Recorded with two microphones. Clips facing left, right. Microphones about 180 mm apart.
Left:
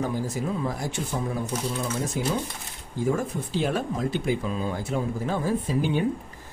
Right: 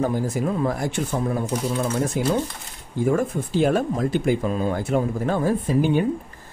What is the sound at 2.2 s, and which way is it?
Speech, 60° right (ahead or behind).